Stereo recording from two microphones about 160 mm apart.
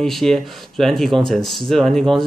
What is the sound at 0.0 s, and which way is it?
Speech, centre (ahead or behind).